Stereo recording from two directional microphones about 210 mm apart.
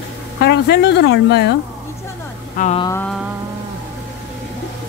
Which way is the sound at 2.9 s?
10° left (ahead or behind).